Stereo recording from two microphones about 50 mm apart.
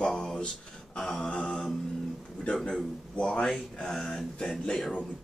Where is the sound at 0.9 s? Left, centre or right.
Centre.